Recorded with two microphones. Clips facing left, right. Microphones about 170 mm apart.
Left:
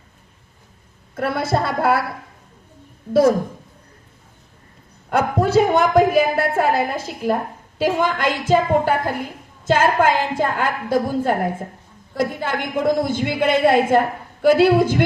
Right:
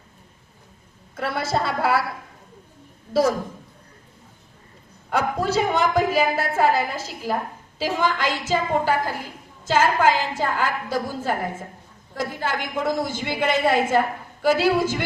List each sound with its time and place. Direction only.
1.1 s a woman's voice: 55° left (ahead or behind)
3.1 s a woman's voice: 55° left (ahead or behind)
5.0 s a woman's voice: 55° left (ahead or behind)